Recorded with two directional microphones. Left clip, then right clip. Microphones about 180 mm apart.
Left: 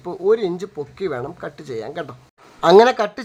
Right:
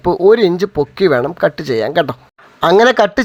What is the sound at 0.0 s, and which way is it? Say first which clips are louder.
Speech: right 9 dB; 30° right (ahead or behind).